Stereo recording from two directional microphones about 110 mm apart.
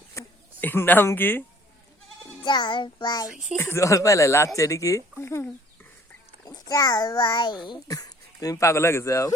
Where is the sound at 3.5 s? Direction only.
25° left (ahead or behind).